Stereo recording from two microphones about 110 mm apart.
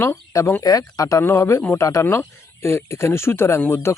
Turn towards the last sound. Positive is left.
turn(degrees=20)  # may be behind; listen again after turning